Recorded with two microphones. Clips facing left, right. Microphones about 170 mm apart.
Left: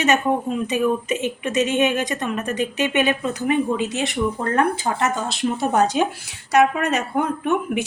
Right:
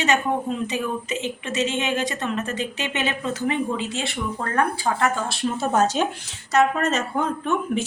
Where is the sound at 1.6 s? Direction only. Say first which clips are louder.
Left 3 dB; 15° left (ahead or behind).